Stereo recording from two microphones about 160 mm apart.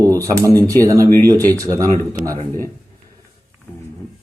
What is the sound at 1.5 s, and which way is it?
Speech, 20° right (ahead or behind).